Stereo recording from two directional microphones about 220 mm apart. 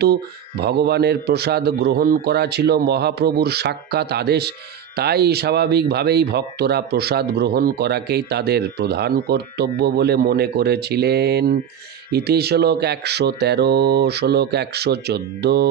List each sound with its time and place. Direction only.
0.0 s a man's voice: 45° right (ahead or behind)